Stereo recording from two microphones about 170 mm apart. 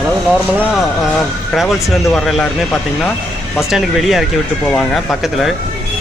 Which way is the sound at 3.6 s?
Centre (ahead or behind).